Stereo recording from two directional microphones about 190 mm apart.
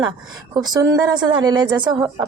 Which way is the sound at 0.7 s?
20° right (ahead or behind).